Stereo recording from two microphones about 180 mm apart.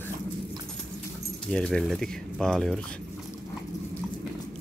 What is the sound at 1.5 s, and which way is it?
Speech, 5° left (ahead or behind).